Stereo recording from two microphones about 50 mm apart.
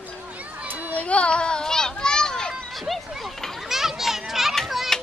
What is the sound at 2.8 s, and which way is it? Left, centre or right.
Children playing, centre.